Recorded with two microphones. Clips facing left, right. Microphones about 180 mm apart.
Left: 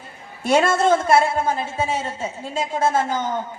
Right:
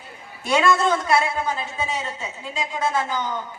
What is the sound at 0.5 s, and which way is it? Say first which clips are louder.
A woman's voice: left 3 dB; 45° left (ahead or behind).